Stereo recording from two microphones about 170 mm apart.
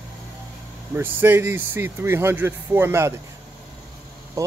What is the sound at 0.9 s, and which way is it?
Speech, 10° right (ahead or behind).